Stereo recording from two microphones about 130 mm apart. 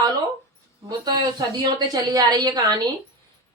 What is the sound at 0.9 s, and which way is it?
A woman's voice, 35° right (ahead or behind).